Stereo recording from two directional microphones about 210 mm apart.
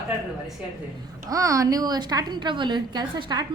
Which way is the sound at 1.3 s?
15° right (ahead or behind).